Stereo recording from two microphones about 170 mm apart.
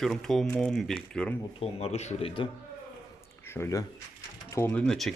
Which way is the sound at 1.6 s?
35° left (ahead or behind).